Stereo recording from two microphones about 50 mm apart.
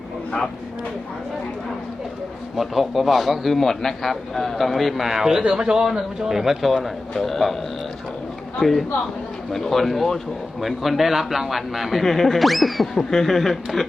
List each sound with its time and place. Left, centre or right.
2.6 s a man's voice: centre
7.1 s a man's voice: centre
8.5 s a man's voice: centre